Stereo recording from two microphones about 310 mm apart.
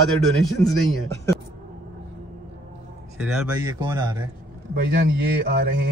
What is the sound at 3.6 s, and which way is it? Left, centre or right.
Speech, centre.